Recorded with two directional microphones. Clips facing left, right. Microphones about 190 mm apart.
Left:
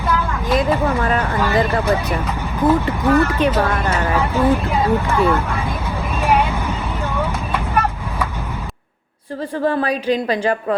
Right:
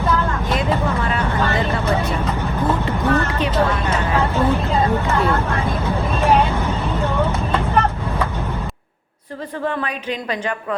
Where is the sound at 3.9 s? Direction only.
10° left (ahead or behind).